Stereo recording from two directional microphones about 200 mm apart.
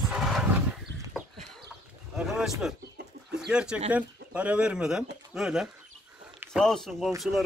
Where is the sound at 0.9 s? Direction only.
60° right (ahead or behind).